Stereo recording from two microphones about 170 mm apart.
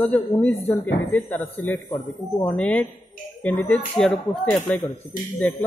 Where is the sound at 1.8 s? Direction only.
25° left (ahead or behind).